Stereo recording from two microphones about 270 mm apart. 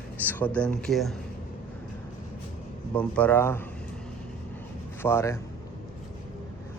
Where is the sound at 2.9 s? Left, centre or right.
Centre.